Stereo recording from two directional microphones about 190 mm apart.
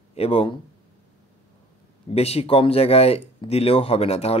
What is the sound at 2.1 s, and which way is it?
Speech, 30° left (ahead or behind).